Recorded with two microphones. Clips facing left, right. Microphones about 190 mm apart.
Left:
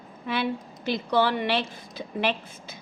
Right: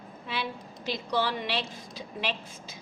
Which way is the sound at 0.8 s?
55° left (ahead or behind).